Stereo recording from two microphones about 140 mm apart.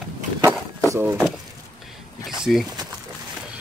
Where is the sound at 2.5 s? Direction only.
Centre (ahead or behind).